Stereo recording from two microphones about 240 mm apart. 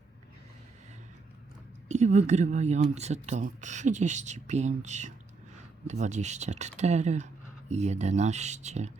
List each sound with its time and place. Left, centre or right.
1.9 s speech: right